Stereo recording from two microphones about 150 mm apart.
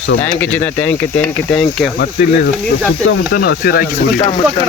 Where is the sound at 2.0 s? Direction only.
90° left.